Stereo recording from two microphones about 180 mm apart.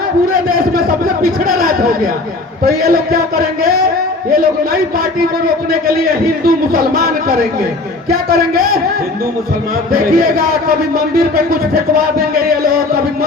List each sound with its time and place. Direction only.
0.4 s a man's voice: 50° right (ahead or behind)
9.9 s a man's voice: 55° right (ahead or behind)